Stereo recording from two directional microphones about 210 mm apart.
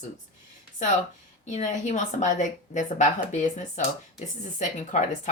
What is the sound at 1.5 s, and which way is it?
Speech, 35° left (ahead or behind).